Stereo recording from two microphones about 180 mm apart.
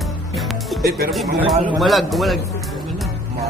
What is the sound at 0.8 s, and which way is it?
Speech, 55° right (ahead or behind).